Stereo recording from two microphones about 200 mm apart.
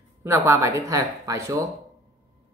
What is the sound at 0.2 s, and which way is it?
Speech, 10° right (ahead or behind).